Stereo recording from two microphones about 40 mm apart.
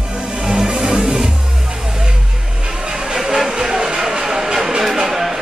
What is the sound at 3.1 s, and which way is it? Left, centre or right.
Music, centre.